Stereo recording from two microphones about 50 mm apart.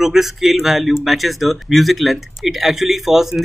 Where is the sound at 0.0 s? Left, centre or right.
Centre.